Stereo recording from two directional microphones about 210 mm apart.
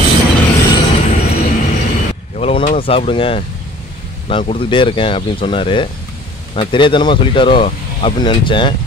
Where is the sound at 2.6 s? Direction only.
30° left (ahead or behind).